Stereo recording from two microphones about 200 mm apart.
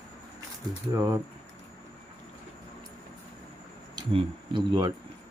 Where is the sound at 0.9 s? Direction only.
15° right (ahead or behind).